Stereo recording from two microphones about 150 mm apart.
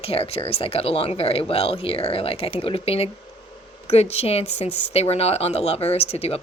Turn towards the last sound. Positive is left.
turn(degrees=45)  # may be behind; listen again after turning